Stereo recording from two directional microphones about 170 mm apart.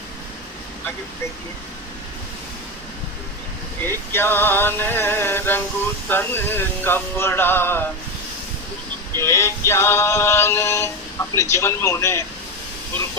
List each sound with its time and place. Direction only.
3.8 s music: 15° left (ahead or behind)
9.2 s music: 15° left (ahead or behind)